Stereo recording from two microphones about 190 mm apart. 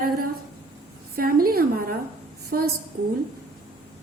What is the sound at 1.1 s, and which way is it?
A woman's voice, 50° right (ahead or behind).